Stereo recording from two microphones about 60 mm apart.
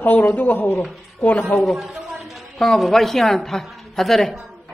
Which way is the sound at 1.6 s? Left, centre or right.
Centre.